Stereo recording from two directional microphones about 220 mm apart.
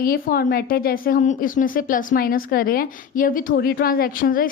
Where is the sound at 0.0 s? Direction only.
40° left (ahead or behind).